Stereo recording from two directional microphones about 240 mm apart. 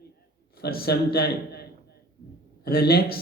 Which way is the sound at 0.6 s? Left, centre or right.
Left.